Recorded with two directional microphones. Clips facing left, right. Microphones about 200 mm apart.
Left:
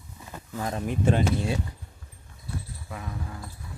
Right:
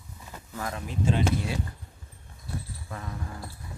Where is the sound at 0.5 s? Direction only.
25° left (ahead or behind).